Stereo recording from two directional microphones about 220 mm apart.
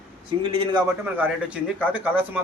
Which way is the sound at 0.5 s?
25° right (ahead or behind).